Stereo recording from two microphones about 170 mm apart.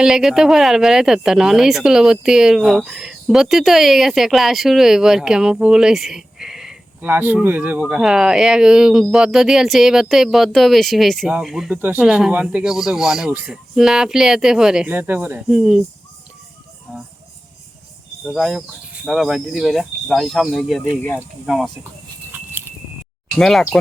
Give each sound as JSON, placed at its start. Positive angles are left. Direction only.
{"t": 0.0, "sound": "a woman's voice", "side_deg": -5}
{"t": 16.9, "sound": "speech", "side_deg": -10}
{"t": 18.3, "sound": "a woman's voice", "side_deg": 0}
{"t": 23.4, "sound": "a woman's voice", "side_deg": 0}